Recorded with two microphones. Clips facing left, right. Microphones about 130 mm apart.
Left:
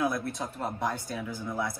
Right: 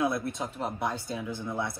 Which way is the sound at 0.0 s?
25° right (ahead or behind).